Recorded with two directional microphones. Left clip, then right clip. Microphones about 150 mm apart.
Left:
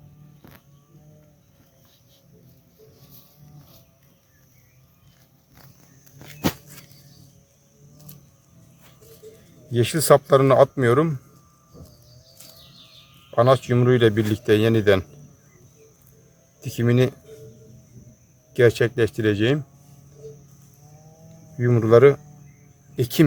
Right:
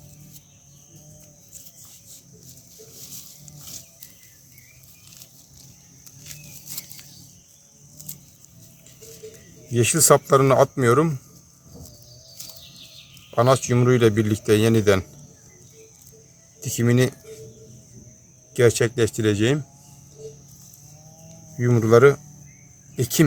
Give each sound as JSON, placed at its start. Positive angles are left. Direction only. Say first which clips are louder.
{"t": 9.7, "sound": "speech", "louder": "even", "side_deg": 5}
{"t": 13.3, "sound": "speech", "louder": "left 1 dB", "side_deg": 15}
{"t": 16.6, "sound": "speech", "louder": "even", "side_deg": 15}
{"t": 18.5, "sound": "speech", "louder": "left 1 dB", "side_deg": 15}
{"t": 21.6, "sound": "speech", "louder": "left 1 dB", "side_deg": 20}